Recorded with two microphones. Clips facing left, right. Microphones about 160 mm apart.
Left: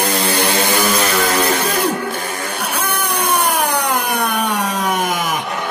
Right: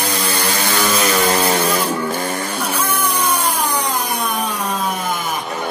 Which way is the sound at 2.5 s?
65° left (ahead or behind).